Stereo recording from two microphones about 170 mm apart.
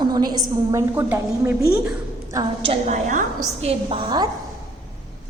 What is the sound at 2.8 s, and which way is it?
Speech, 45° right (ahead or behind).